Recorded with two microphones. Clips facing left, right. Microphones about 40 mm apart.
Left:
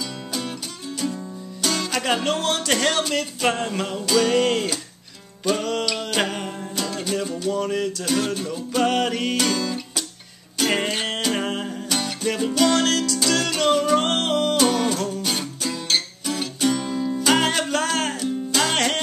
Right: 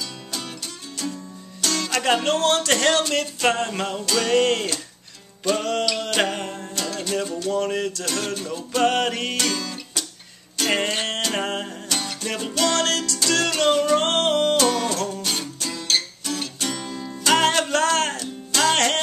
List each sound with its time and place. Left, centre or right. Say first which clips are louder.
1.0 s music: left 3 dB; centre